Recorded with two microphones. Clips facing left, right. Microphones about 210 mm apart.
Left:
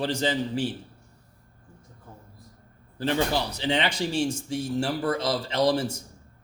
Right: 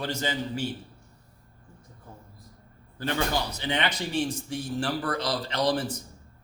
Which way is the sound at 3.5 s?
30° left (ahead or behind).